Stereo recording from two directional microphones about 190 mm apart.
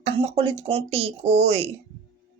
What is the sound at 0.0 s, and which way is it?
Speech, 30° right (ahead or behind).